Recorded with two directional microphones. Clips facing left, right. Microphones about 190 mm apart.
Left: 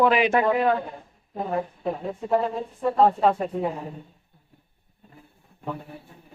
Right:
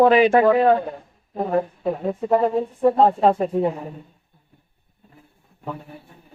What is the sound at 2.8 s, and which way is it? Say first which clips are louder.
Speech: right 3 dB; 30° right (ahead or behind).